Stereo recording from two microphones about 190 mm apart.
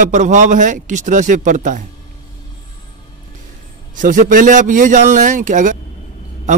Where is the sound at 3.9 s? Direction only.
45° right (ahead or behind).